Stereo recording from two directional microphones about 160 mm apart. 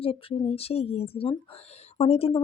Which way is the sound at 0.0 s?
35° left (ahead or behind).